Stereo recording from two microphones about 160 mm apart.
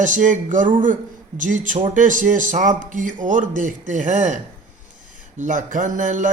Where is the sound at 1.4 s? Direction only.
55° right (ahead or behind).